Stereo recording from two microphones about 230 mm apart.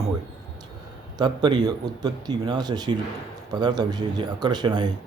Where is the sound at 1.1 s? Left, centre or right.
Centre.